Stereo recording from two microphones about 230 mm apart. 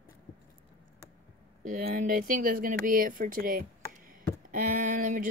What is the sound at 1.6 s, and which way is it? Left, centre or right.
Speech, right.